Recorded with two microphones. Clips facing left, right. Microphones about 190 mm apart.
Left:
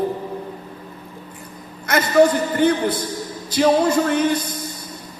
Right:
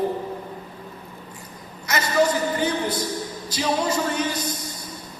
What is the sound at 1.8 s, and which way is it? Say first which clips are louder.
A man's voice: left 6 dB; 55° left (ahead or behind).